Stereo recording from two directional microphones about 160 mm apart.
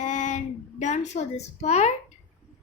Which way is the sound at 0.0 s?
50° left (ahead or behind).